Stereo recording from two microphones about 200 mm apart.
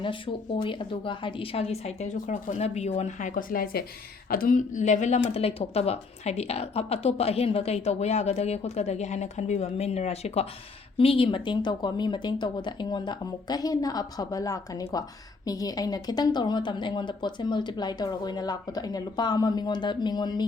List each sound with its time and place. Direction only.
0.0 s a woman's voice: 25° left (ahead or behind)